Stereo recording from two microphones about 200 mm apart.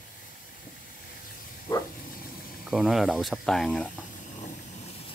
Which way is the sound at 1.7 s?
10° left (ahead or behind).